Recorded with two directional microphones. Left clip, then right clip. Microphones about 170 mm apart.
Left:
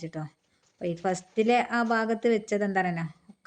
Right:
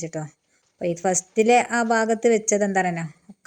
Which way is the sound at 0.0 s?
20° right (ahead or behind).